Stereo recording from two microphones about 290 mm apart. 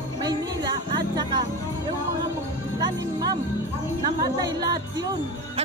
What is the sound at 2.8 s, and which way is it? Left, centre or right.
Speech, centre.